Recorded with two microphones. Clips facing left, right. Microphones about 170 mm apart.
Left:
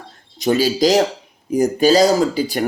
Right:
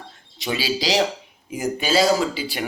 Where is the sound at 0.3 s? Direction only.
45° left (ahead or behind).